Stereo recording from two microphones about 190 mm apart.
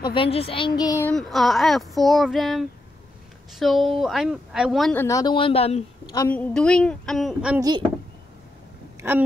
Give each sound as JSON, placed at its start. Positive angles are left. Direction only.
{"t": 0.0, "sound": "speech", "side_deg": 25}
{"t": 1.1, "sound": "speech", "side_deg": 0}
{"t": 4.9, "sound": "speech", "side_deg": 15}
{"t": 6.1, "sound": "speech", "side_deg": 10}